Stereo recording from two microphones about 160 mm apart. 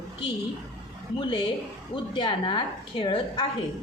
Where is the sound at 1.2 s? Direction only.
30° left (ahead or behind).